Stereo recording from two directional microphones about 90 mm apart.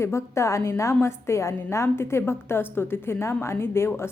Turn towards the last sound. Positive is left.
turn(degrees=25)  # may be behind; listen again after turning